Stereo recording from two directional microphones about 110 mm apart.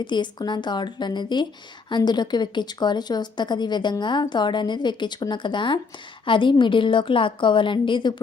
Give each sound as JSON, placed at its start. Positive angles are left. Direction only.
{"t": 0.0, "sound": "a woman's voice", "side_deg": 45}